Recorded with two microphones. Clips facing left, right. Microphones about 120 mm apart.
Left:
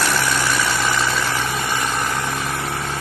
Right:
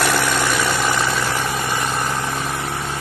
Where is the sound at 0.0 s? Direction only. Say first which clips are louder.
Right 2 dB; 20° right (ahead or behind).